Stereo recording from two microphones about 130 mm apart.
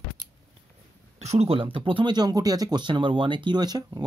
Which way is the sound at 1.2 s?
55° right (ahead or behind).